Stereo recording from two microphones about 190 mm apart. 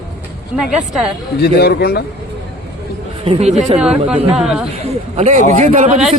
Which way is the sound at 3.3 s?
35° right (ahead or behind).